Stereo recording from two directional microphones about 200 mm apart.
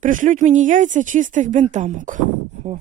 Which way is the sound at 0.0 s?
40° right (ahead or behind).